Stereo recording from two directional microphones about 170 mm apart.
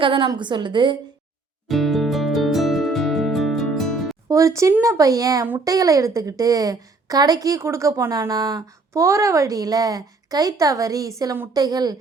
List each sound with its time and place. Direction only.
0.0 s speech: 30° right (ahead or behind)
1.6 s music: centre (ahead or behind)
4.3 s speech: 20° right (ahead or behind)